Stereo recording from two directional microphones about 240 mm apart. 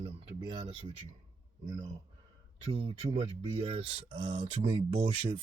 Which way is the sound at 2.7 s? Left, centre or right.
Right.